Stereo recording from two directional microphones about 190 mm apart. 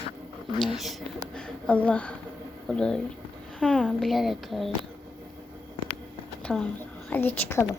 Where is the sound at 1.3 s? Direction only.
5° left (ahead or behind).